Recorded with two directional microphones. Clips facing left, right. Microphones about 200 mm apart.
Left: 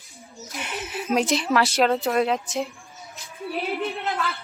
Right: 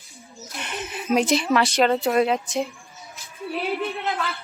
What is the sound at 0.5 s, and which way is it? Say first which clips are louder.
A woman's voice: left 1 dB; 5° left (ahead or behind).